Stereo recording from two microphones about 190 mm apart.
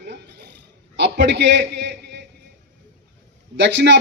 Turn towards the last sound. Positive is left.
turn(degrees=-65)  # may be behind; listen again after turning